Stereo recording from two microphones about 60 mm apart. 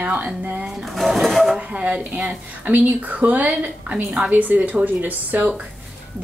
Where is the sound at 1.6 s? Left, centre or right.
Right.